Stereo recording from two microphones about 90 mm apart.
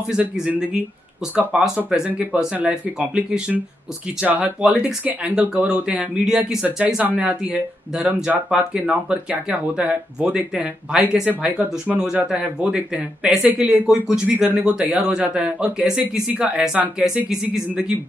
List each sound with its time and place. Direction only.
0.1 s speech: 10° right (ahead or behind)